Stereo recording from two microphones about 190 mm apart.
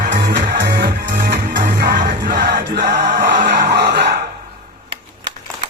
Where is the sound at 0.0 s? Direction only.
55° right (ahead or behind).